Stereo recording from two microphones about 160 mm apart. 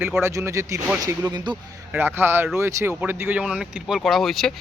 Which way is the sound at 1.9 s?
15° right (ahead or behind).